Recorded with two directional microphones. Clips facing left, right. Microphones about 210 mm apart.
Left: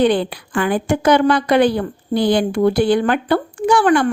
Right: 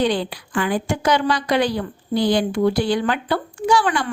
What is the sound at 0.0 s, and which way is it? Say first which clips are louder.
A woman's voice: left 5 dB; 55° left (ahead or behind).